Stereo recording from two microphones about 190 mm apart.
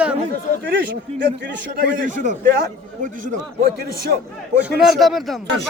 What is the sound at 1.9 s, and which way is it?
Speech, 45° right (ahead or behind).